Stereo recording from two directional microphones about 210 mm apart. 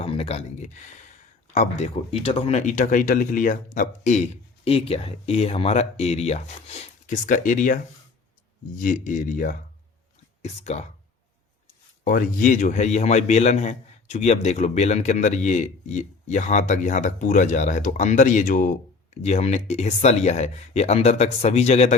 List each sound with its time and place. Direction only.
0.0 s a man's voice: 30° left (ahead or behind)
8.8 s a man's voice: 40° left (ahead or behind)
12.0 s a man's voice: 40° left (ahead or behind)